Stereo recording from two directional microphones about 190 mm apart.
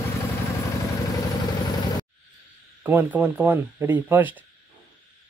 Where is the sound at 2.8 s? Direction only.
10° right (ahead or behind).